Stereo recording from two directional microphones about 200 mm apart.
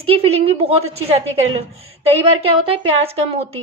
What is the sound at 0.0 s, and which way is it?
A woman's voice, 30° right (ahead or behind).